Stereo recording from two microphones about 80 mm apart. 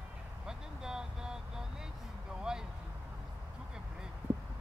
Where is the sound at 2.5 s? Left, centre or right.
Centre.